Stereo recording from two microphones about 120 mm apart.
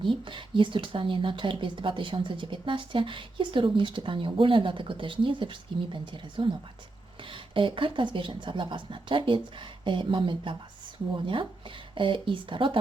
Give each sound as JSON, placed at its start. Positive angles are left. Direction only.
{"t": 0.0, "sound": "speech", "side_deg": -45}
{"t": 11.9, "sound": "speech", "side_deg": -45}